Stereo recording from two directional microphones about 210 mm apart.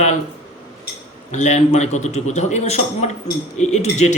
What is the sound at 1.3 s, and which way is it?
Speech, 35° left (ahead or behind).